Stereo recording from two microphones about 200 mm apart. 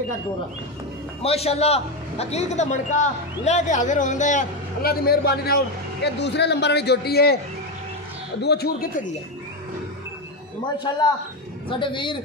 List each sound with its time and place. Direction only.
1.2 s a man's voice: 30° left (ahead or behind); by 7.3 s 50° left (ahead or behind)
8.4 s speech: 55° left (ahead or behind)
10.9 s a man's voice: 20° left (ahead or behind)